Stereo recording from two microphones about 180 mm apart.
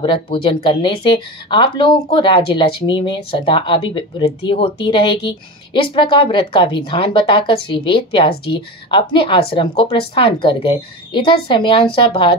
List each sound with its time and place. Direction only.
0.0 s speech: 30° left (ahead or behind)